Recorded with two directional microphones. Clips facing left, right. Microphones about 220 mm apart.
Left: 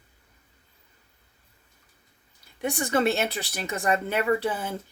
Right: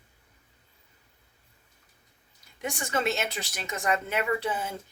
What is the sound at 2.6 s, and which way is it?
Speech, 35° left (ahead or behind).